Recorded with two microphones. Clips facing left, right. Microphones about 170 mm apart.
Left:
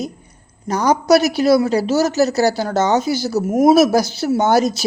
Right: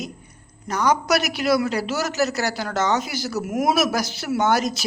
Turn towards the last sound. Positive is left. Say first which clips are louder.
# left 5 dB
turn(degrees=30)  # may be behind; listen again after turning